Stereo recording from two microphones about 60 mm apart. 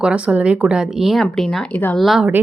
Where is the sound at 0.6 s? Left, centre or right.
Centre.